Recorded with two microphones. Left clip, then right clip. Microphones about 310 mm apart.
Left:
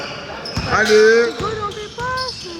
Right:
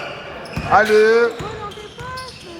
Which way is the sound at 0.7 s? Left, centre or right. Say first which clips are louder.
Even; centre.